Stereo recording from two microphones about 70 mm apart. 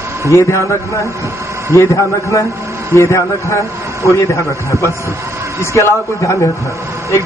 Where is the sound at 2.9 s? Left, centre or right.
Left.